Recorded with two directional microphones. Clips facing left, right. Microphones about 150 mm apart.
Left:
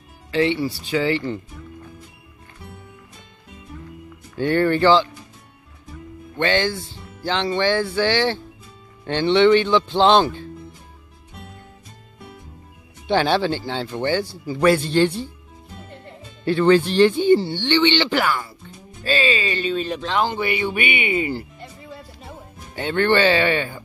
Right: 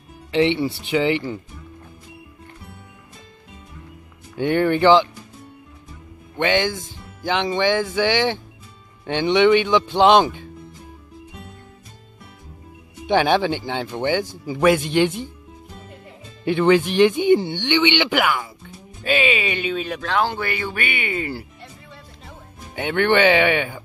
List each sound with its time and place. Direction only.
0.3 s speech: 20° right (ahead or behind)
4.4 s speech: 15° right (ahead or behind)
6.3 s speech: 15° right (ahead or behind)
13.0 s speech: 15° right (ahead or behind)
16.4 s speech: 15° right (ahead or behind)
20.0 s a man's voice: 15° left (ahead or behind)
21.4 s music: centre (ahead or behind)
22.8 s speech: 15° right (ahead or behind)